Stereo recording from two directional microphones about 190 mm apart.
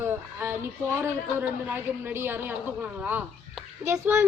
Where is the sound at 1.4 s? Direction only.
10° right (ahead or behind).